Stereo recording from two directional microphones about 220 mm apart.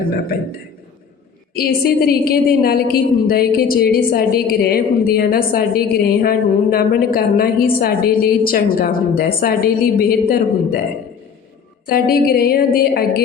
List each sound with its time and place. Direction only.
1.5 s a woman's voice: 45° left (ahead or behind)
11.9 s a woman's voice: 45° left (ahead or behind)